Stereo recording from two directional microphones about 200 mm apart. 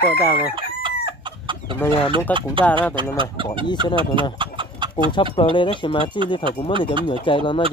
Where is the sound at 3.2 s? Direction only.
25° right (ahead or behind).